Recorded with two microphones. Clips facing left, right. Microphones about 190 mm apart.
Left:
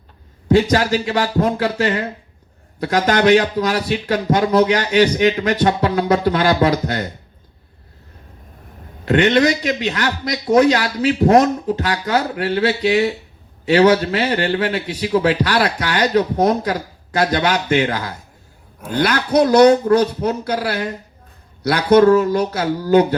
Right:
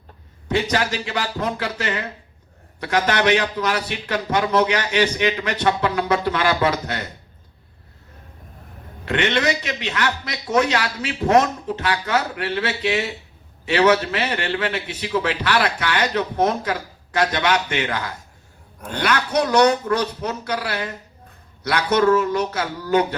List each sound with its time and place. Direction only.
0.4 s a man's voice: 40° left (ahead or behind)
9.0 s a man's voice: 40° left (ahead or behind)